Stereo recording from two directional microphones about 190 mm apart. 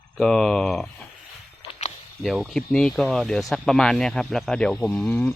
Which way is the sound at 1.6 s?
30° left (ahead or behind).